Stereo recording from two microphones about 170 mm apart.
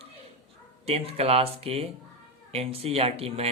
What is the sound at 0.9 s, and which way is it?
A man's voice, 35° right (ahead or behind).